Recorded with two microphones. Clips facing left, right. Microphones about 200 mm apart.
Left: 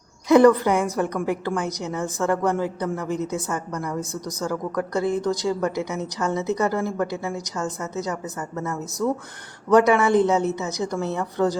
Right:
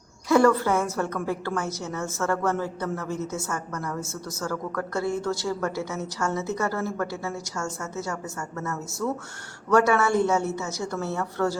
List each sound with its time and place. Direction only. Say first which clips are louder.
0.3 s a woman's voice: left 5 dB; 20° left (ahead or behind)